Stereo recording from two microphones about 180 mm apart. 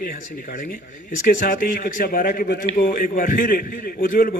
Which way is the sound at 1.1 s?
50° left (ahead or behind).